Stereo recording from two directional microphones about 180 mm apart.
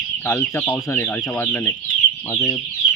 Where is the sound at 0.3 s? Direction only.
15° left (ahead or behind).